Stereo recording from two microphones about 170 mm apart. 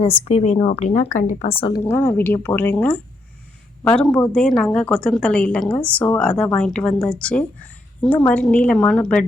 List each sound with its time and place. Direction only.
0.3 s speech: 35° left (ahead or behind)
1.8 s a woman's voice: 15° left (ahead or behind)